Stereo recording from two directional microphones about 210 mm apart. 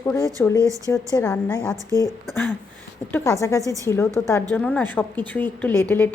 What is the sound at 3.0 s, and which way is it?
Speech, 10° left (ahead or behind).